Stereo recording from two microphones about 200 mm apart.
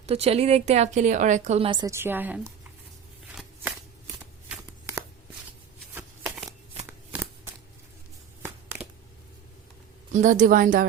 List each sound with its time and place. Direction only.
0.0 s a woman's voice: 30° right (ahead or behind); by 2.5 s 10° right (ahead or behind)
3.3 s shuffling cards: 5° right (ahead or behind)
10.1 s a woman's voice: 35° right (ahead or behind)